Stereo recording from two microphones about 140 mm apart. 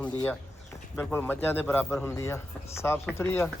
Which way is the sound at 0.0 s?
10° left (ahead or behind).